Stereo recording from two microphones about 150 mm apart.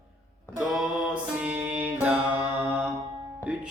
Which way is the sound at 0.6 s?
Centre (ahead or behind).